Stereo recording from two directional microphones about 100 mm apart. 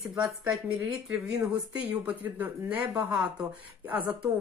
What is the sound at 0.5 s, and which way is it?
Speech, 5° right (ahead or behind).